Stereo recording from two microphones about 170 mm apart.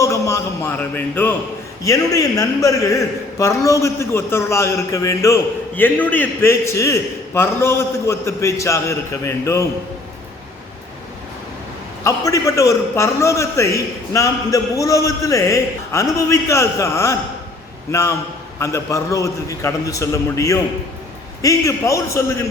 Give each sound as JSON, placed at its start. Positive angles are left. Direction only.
{"t": 0.0, "sound": "a man's voice", "side_deg": 20}
{"t": 12.0, "sound": "a man's voice", "side_deg": 20}
{"t": 18.6, "sound": "a man's voice", "side_deg": 15}